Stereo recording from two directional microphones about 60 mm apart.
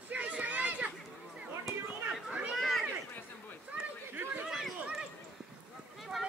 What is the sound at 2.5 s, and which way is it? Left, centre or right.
Cat, centre.